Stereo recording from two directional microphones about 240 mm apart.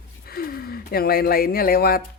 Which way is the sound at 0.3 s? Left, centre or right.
Left.